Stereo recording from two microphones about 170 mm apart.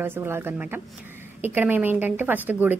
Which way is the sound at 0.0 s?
10° right (ahead or behind).